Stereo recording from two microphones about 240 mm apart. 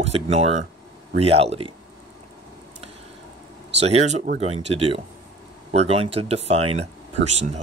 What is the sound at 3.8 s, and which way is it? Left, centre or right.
Speech, right.